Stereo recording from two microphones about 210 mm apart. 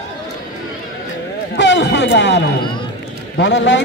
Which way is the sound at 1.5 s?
55° left (ahead or behind).